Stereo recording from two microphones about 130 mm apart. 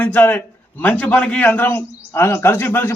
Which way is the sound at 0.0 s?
15° left (ahead or behind).